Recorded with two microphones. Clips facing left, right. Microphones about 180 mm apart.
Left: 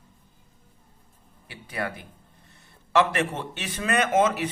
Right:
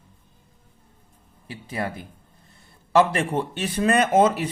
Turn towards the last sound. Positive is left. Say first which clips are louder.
# right 3 dB
turn(degrees=-35)  # may be behind; listen again after turning